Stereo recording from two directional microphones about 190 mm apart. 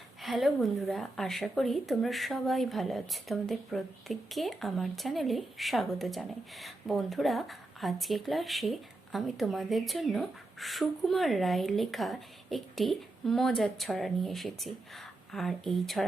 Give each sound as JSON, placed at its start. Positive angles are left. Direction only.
{"t": 0.2, "sound": "a woman's voice", "side_deg": 0}